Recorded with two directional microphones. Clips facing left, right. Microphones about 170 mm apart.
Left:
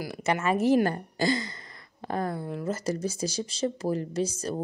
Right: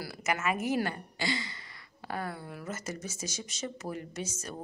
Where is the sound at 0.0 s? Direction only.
25° left (ahead or behind).